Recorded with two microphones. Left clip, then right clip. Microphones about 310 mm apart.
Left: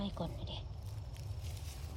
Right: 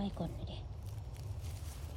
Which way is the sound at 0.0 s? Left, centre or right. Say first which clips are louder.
Even; centre.